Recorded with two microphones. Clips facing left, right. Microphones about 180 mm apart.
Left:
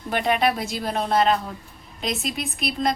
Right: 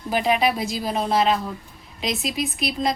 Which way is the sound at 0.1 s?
5° right (ahead or behind).